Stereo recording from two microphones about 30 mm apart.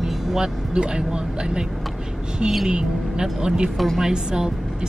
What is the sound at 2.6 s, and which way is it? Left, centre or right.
A woman's voice, right.